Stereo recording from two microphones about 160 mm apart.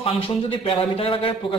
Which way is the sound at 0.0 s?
35° left (ahead or behind).